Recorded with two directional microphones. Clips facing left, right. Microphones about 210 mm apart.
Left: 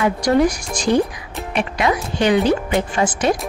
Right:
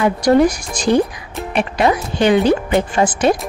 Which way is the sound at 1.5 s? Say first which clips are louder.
Right 3 dB; 35° right (ahead or behind).